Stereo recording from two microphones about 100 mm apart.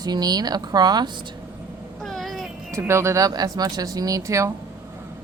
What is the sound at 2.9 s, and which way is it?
A woman's voice, 30° right (ahead or behind).